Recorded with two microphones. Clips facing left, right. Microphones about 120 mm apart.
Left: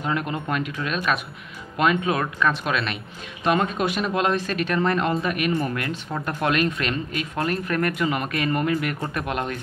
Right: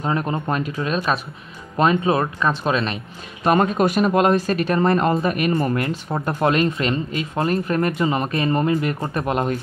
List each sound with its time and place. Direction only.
0.0 s speech: 35° right (ahead or behind)
5.8 s speech: 35° right (ahead or behind)